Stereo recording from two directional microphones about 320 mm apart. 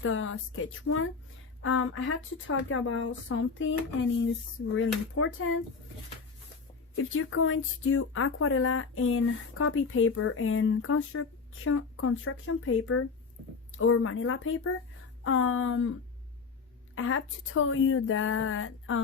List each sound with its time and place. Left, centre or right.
0.0 s speech: left
5.1 s speech: left
6.9 s speech: left
16.9 s speech: left